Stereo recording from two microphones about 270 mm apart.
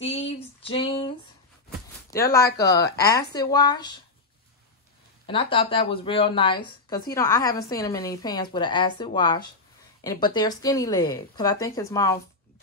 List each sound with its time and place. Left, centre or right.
0.0 s female singing: left
2.0 s speech: centre
3.0 s speech: left
3.3 s speech: centre
5.2 s speech: centre